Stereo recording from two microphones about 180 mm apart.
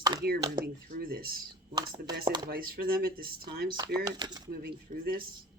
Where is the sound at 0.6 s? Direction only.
55° right (ahead or behind).